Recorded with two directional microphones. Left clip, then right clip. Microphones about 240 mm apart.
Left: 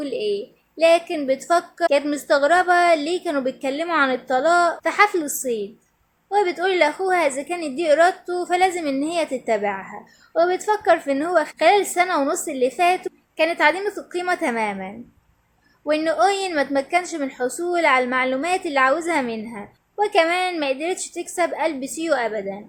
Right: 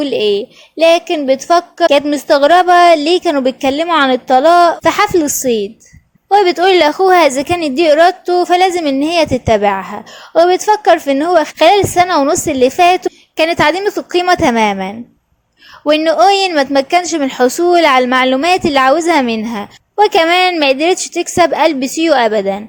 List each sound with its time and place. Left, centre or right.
0.0 s a woman's voice: right